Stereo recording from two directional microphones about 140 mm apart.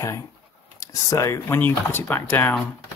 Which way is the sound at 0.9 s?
20° left (ahead or behind).